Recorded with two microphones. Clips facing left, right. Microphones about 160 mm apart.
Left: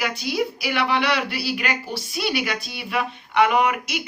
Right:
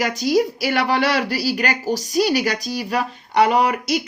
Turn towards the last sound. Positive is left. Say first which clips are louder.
# right 3 dB
turn(degrees=-35)  # may be behind; listen again after turning